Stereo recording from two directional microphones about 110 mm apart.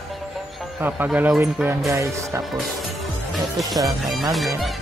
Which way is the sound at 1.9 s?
30° right (ahead or behind).